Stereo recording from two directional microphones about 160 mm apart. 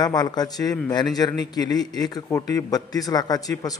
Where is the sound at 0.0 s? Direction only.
25° left (ahead or behind).